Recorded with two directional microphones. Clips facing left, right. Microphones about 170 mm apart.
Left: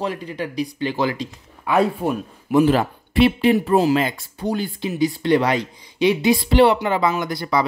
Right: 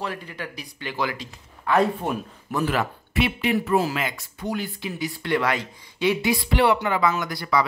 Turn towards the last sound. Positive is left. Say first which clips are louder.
# left 3 dB
turn(degrees=25)  # may be behind; listen again after turning